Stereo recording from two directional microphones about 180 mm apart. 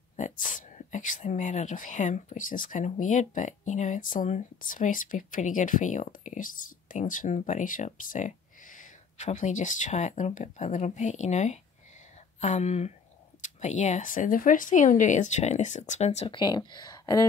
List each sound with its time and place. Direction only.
0.1 s speech: 45° left (ahead or behind)
16.3 s speech: 25° left (ahead or behind)